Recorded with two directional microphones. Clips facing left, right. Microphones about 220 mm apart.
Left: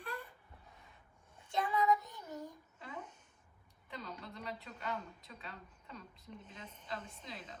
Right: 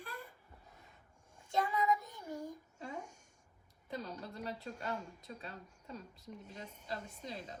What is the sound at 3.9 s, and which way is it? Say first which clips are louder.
A woman's voice: right 4 dB; 40° right (ahead or behind).